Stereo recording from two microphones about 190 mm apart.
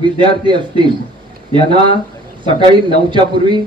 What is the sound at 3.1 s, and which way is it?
Speech, 25° right (ahead or behind).